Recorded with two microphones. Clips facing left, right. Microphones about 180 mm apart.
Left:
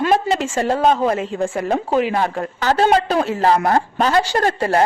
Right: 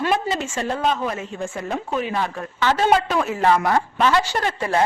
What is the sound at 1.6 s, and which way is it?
A woman's voice, 35° left (ahead or behind).